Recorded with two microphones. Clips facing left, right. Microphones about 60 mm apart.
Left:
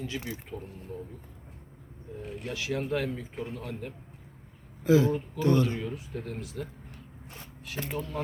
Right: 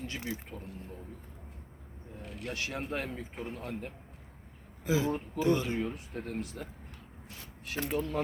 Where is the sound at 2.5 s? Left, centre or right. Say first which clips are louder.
Left 4 dB; right.